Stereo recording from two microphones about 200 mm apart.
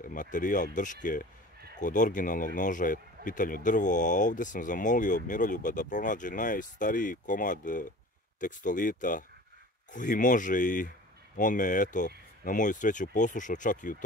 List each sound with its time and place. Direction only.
0.0 s speech: 40° left (ahead or behind)